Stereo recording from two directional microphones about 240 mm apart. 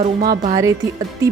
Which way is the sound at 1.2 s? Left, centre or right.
Centre.